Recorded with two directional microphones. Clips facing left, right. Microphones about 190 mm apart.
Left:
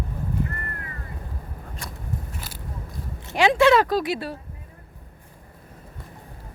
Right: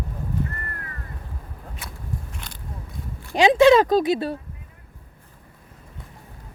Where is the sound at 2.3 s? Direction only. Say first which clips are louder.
Left 1 dB; 5° left (ahead or behind).